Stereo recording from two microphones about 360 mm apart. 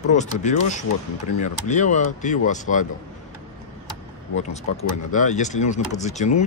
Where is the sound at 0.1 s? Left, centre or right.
Centre.